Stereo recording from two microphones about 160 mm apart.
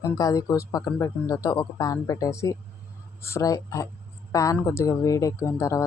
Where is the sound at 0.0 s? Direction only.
20° left (ahead or behind).